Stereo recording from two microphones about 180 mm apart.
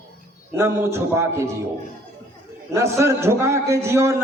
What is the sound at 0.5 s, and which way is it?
Speech, 15° right (ahead or behind).